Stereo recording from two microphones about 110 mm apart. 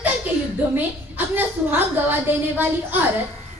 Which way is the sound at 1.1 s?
20° right (ahead or behind).